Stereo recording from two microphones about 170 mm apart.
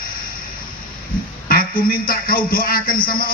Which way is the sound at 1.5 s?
60° left (ahead or behind).